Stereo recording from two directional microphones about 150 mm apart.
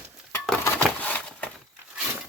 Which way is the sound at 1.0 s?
10° left (ahead or behind).